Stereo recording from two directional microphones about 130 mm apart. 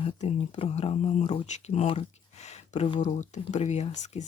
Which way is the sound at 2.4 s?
60° left (ahead or behind).